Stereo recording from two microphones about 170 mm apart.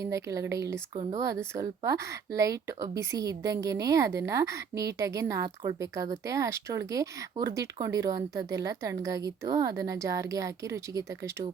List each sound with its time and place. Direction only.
0.0 s speech: 20° right (ahead or behind)
1.8 s a woman's voice: 15° right (ahead or behind)